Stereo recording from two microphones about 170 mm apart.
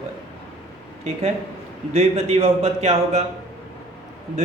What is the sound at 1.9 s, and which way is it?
A man's voice, 40° right (ahead or behind).